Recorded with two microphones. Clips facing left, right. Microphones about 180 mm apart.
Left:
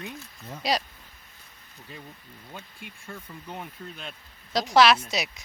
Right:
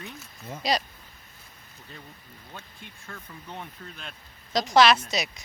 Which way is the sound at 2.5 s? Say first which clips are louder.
Left 2 dB; 10° left (ahead or behind).